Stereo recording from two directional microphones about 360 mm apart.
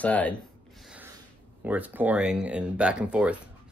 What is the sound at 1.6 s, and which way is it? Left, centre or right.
Speech, centre.